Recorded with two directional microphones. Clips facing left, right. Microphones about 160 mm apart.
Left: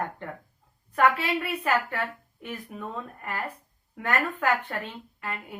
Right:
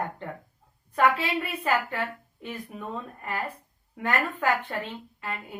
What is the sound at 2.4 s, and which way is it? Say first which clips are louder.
A woman's voice: even; 15° right (ahead or behind).